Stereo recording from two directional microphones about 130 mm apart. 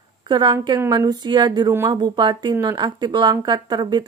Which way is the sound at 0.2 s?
35° right (ahead or behind).